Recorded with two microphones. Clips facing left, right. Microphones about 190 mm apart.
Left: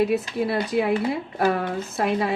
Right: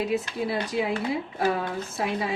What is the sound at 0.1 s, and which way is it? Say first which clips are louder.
Speech: left 4 dB; 60° left (ahead or behind).